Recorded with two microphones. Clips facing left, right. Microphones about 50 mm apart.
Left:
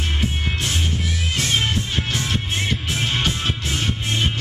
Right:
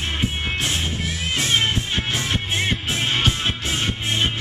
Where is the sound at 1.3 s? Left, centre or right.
Centre.